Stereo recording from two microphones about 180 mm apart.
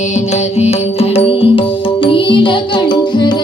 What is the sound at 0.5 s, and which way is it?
Music, 35° left (ahead or behind).